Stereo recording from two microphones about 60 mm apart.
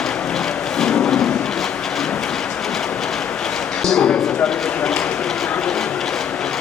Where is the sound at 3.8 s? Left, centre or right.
Centre.